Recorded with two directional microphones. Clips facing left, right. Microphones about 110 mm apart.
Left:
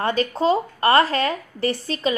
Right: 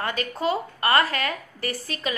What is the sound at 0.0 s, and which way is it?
A woman's voice, 30° left (ahead or behind).